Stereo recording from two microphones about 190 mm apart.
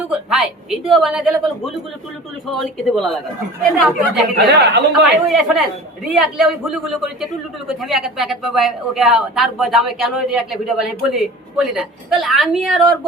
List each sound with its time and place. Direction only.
0.1 s a woman's voice: centre (ahead or behind)
4.4 s speech: 60° right (ahead or behind)
5.0 s a woman's voice: centre (ahead or behind)